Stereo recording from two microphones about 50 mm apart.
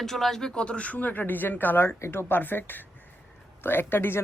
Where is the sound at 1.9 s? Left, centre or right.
Left.